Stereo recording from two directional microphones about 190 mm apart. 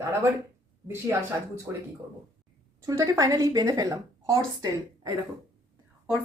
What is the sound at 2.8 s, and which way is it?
A woman's voice, 15° right (ahead or behind).